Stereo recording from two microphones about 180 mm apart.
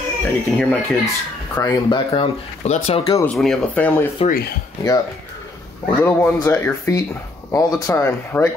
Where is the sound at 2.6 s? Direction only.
35° left (ahead or behind).